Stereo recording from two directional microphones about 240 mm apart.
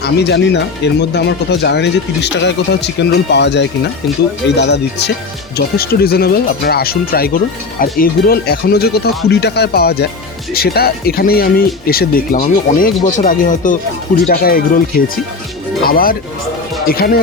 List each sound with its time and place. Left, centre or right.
0.0 s speech: left